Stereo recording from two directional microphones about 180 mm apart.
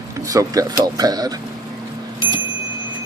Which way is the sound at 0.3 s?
20° right (ahead or behind).